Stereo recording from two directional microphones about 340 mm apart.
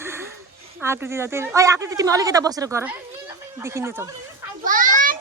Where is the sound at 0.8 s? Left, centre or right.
Centre.